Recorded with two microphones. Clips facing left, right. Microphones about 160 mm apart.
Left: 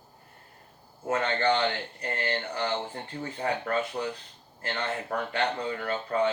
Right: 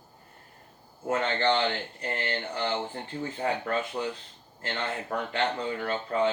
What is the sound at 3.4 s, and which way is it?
Speech, 25° right (ahead or behind).